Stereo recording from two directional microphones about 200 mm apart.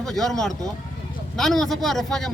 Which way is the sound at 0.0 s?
Centre (ahead or behind).